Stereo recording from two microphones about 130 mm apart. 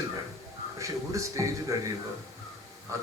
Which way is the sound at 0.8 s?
25° right (ahead or behind).